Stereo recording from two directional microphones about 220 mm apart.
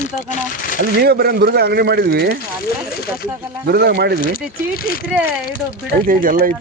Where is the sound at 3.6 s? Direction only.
45° right (ahead or behind).